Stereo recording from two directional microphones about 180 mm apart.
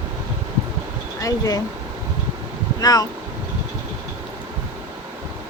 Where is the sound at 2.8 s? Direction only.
20° left (ahead or behind).